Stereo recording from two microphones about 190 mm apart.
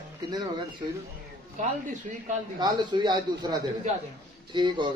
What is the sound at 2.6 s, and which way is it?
Speech, 20° right (ahead or behind).